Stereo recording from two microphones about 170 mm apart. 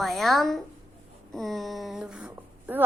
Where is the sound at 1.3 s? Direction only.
Centre (ahead or behind).